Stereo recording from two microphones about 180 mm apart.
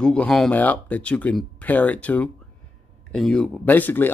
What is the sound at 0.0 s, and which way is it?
Speech, 5° left (ahead or behind).